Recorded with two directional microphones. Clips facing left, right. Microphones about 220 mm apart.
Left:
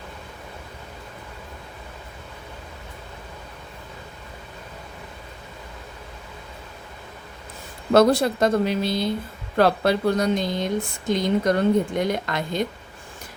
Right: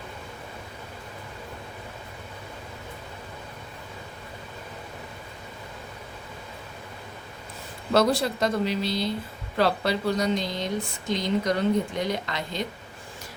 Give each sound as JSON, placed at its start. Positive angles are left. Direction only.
{"t": 7.9, "sound": "a woman's voice", "side_deg": 50}